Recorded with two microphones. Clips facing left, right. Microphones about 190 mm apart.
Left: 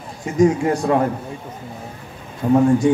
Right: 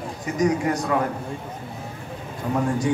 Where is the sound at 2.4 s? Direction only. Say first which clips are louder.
Left 10 dB; 25° left (ahead or behind).